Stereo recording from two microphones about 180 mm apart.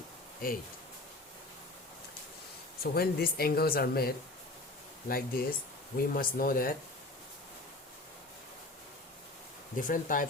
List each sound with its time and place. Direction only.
0.4 s speech: 55° left (ahead or behind)
2.8 s speech: 60° left (ahead or behind)
9.7 s speech: 50° left (ahead or behind)